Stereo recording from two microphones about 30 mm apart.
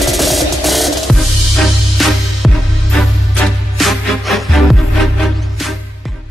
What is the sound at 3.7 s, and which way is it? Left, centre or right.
Music, centre.